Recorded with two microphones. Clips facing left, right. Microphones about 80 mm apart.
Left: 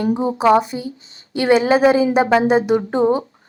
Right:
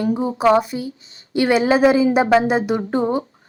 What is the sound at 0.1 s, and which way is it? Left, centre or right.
A woman's voice, centre.